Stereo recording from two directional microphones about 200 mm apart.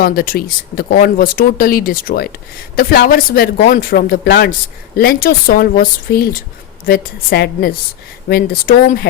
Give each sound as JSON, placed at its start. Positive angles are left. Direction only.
{"t": 0.0, "sound": "speech", "side_deg": 45}